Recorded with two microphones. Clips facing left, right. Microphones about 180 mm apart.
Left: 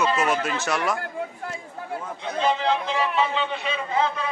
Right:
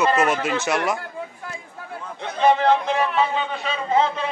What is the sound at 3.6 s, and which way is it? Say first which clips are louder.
Speech: right 6 dB; 30° right (ahead or behind).